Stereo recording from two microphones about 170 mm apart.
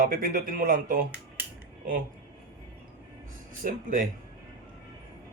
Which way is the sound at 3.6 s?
50° right (ahead or behind).